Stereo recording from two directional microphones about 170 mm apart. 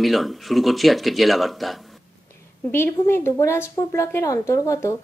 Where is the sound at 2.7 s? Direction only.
15° left (ahead or behind).